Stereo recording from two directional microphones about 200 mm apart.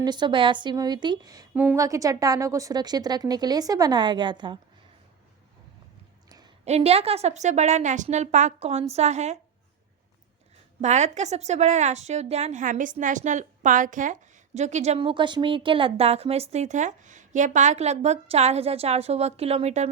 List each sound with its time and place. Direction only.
0.0 s speech: 20° right (ahead or behind)
6.2 s a sound: 20° right (ahead or behind)
6.7 s a woman's voice: 30° right (ahead or behind)
10.8 s a woman's voice: 35° right (ahead or behind)